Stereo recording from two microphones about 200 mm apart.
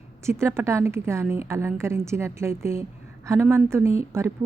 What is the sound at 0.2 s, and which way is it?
A woman's voice, 15° right (ahead or behind).